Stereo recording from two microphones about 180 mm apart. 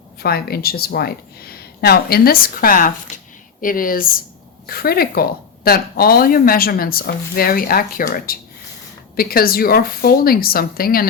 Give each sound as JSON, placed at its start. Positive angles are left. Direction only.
{"t": 0.2, "sound": "speech", "side_deg": 60}